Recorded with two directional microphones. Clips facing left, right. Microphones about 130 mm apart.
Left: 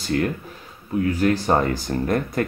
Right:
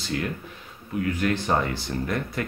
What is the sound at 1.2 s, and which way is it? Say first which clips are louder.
Speech: left 5 dB; 40° left (ahead or behind).